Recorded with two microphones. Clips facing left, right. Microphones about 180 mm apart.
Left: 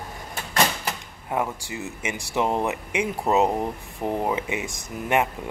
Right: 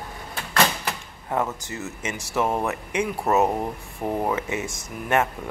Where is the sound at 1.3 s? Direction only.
10° left (ahead or behind).